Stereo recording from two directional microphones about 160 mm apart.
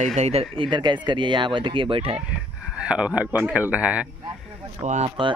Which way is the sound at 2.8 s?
5° right (ahead or behind).